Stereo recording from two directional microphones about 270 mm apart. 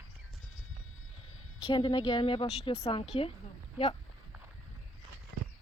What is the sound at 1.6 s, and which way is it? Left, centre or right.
Speech, centre.